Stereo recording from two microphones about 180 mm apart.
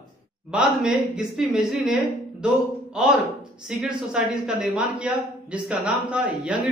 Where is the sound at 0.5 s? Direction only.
5° right (ahead or behind).